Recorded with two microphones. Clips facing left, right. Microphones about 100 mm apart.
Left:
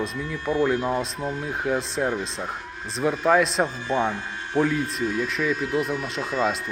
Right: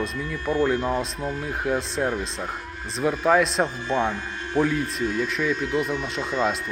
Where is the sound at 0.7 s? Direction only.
Centre (ahead or behind).